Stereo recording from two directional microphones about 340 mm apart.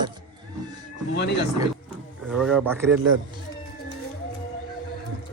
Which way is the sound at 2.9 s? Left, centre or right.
Right.